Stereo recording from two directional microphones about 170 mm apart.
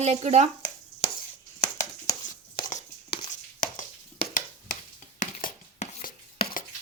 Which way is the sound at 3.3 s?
50° left (ahead or behind).